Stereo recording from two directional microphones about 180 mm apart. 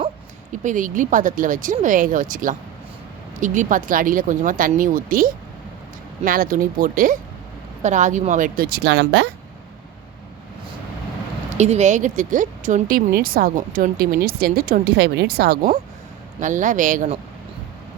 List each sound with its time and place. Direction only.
0.6 s speech: 45° right (ahead or behind); by 9.3 s 65° right (ahead or behind)
11.5 s speech: 40° right (ahead or behind)
13.1 s speech: 55° right (ahead or behind)
16.4 s speech: 45° right (ahead or behind)